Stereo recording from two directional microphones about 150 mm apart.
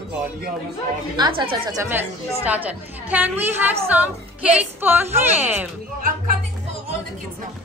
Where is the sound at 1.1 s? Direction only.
30° right (ahead or behind).